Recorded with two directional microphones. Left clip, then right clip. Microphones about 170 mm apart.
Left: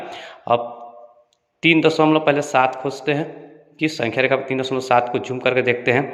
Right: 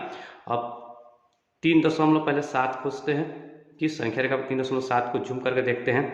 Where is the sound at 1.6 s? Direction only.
25° left (ahead or behind).